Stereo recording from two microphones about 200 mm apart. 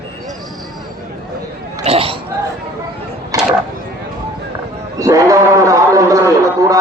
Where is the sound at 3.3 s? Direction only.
15° right (ahead or behind).